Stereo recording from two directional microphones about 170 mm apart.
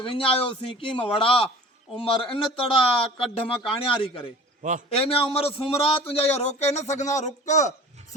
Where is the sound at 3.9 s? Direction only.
30° left (ahead or behind).